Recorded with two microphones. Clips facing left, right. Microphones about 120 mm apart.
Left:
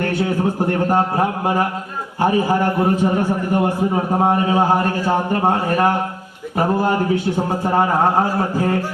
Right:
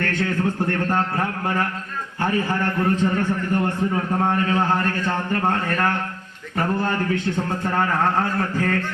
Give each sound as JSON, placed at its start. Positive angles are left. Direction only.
{"t": 0.0, "sound": "a man's voice", "side_deg": 10}
{"t": 3.8, "sound": "a man's voice", "side_deg": 25}